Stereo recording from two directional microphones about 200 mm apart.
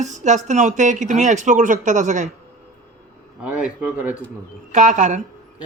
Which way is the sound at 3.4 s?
5° right (ahead or behind).